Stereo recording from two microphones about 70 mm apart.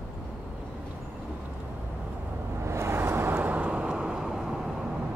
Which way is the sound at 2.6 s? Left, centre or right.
Right.